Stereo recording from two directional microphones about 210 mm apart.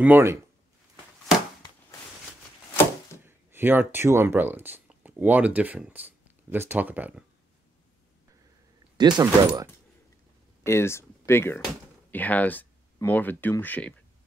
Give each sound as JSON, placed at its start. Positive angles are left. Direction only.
{"t": 0.0, "sound": "speech", "side_deg": -10}
{"t": 1.3, "sound": "a sound", "side_deg": 0}
{"t": 3.3, "sound": "speech", "side_deg": -10}
{"t": 8.9, "sound": "speech", "side_deg": -20}
{"t": 10.6, "sound": "speech", "side_deg": 10}